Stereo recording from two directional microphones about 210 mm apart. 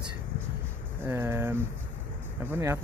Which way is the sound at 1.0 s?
10° right (ahead or behind).